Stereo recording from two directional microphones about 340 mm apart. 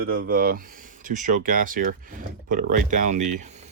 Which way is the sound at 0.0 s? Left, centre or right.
Right.